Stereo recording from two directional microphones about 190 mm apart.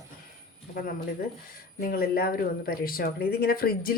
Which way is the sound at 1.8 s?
50° left (ahead or behind).